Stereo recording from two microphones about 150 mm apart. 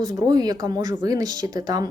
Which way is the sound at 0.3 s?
25° right (ahead or behind).